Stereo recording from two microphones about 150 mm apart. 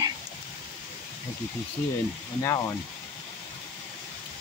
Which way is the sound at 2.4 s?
20° left (ahead or behind).